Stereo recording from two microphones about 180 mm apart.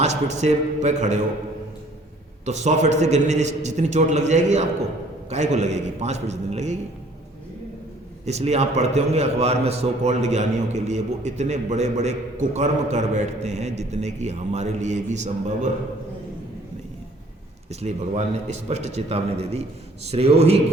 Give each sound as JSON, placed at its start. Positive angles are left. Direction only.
{"t": 0.0, "sound": "a man's voice", "side_deg": -40}
{"t": 2.4, "sound": "a man's voice", "side_deg": -40}
{"t": 8.2, "sound": "a man's voice", "side_deg": -35}
{"t": 17.7, "sound": "a man's voice", "side_deg": -40}